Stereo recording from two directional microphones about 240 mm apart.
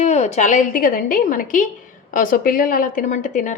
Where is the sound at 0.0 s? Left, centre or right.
Left.